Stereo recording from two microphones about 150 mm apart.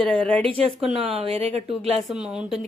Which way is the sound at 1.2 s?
40° right (ahead or behind).